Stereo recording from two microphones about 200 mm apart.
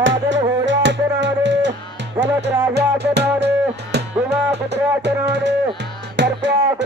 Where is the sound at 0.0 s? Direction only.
65° right (ahead or behind).